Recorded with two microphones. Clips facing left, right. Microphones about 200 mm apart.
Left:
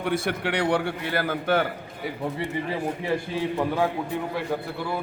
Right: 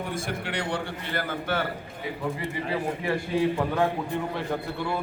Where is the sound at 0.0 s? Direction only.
70° left (ahead or behind); by 1.6 s 55° left (ahead or behind).